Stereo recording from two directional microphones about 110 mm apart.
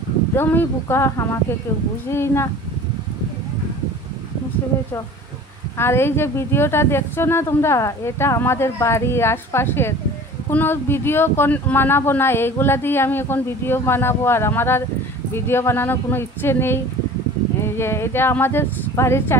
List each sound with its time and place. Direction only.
0.4 s speech: 20° left (ahead or behind)
5.8 s speech: 20° left (ahead or behind)